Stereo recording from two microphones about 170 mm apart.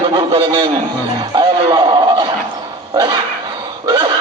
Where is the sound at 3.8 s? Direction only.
25° right (ahead or behind).